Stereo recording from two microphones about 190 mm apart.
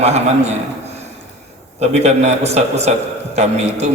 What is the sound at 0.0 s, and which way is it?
Speech, 35° right (ahead or behind).